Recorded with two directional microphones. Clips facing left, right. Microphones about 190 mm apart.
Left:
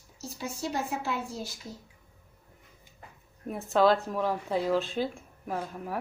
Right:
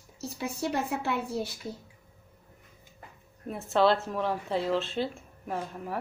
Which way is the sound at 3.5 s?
Centre (ahead or behind).